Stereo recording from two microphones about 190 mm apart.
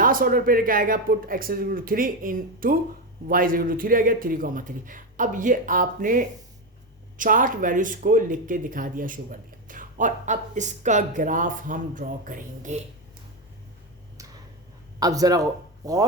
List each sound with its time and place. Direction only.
0.0 s speech: 50° right (ahead or behind)
14.9 s speech: 20° right (ahead or behind)